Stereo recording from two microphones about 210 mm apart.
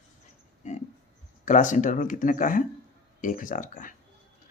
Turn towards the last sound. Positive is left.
turn(degrees=40)  # may be behind; listen again after turning